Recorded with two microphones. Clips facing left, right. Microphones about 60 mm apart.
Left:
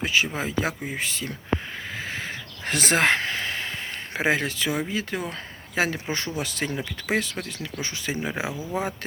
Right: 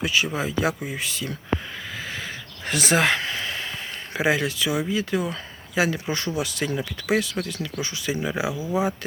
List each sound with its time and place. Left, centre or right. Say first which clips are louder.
0.0 s speech: right 1 dB; left
2.0 s a sound: left 1 dB; left
6.4 s speech: right 2 dB; left